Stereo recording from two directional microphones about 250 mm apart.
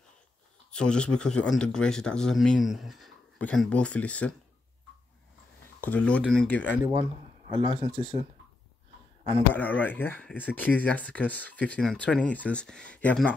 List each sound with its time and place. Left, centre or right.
0.7 s speech: centre
5.8 s speech: centre
6.9 s speech: centre
9.5 s speech: centre